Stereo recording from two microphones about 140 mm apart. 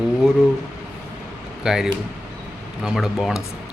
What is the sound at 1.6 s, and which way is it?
Speech, 5° right (ahead or behind).